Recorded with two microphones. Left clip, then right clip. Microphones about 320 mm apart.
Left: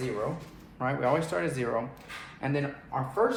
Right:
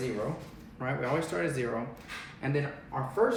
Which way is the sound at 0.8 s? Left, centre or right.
Centre.